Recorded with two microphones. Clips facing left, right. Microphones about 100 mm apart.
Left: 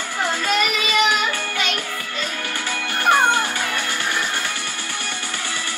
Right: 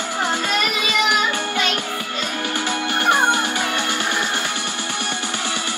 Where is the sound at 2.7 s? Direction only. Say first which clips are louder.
Left 1 dB; 20° right (ahead or behind).